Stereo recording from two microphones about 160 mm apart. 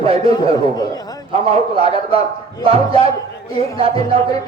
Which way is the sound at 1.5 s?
40° right (ahead or behind).